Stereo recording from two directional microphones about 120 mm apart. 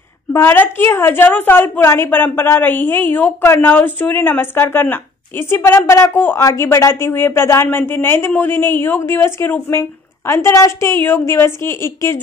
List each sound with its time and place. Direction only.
0.3 s a woman's voice: 20° left (ahead or behind)